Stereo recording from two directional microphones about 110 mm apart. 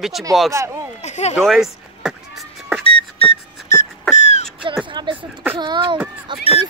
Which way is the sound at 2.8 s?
55° left (ahead or behind).